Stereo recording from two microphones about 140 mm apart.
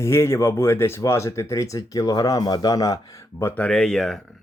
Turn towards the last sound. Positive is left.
turn(degrees=5)  # may be behind; listen again after turning